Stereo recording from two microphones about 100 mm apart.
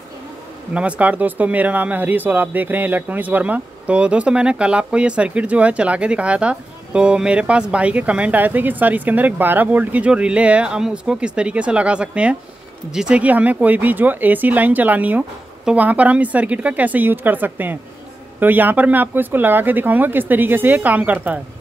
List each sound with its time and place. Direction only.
0.7 s speech: 15° right (ahead or behind)